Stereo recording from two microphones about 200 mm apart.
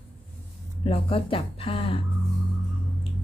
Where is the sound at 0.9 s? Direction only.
25° left (ahead or behind).